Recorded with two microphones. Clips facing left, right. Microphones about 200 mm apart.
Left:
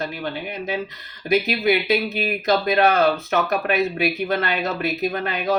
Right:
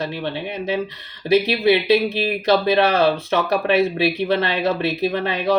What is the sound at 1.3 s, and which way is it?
Speech, 30° right (ahead or behind).